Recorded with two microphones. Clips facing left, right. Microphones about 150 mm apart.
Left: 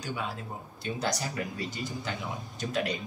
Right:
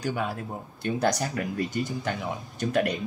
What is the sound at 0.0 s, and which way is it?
Speech, 55° right (ahead or behind).